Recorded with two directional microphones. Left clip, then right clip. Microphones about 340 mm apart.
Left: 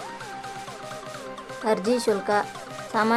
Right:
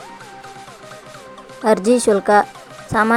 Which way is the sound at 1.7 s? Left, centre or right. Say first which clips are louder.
Right 9 dB; centre.